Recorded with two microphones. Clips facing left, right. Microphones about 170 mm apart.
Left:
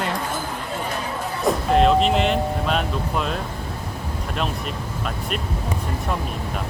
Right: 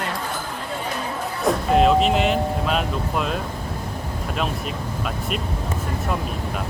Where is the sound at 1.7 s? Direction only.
Centre (ahead or behind).